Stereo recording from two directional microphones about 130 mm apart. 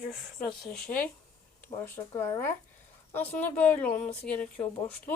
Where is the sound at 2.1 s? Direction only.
20° left (ahead or behind).